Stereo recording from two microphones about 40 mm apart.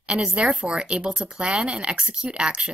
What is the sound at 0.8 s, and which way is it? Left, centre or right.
Speech, right.